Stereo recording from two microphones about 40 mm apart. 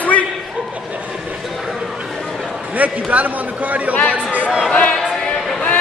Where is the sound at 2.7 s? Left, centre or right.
Right.